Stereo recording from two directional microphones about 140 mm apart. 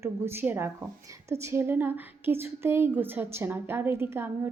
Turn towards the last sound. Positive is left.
turn(degrees=-15)  # may be behind; listen again after turning